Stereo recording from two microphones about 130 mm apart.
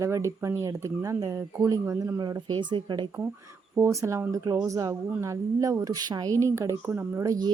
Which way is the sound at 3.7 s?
20° right (ahead or behind).